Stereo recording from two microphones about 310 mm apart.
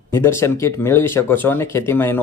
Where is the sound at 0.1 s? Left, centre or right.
Centre.